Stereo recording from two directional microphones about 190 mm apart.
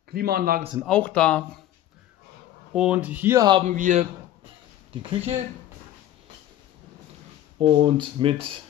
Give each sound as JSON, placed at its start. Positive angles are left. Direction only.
{"t": 0.1, "sound": "a man's voice", "side_deg": -55}
{"t": 0.8, "sound": "speech", "side_deg": 5}
{"t": 2.7, "sound": "speech", "side_deg": -5}
{"t": 3.4, "sound": "speech", "side_deg": -25}
{"t": 3.7, "sound": "a man's voice", "side_deg": -40}
{"t": 5.1, "sound": "a man's voice", "side_deg": -35}
{"t": 7.5, "sound": "speech", "side_deg": -25}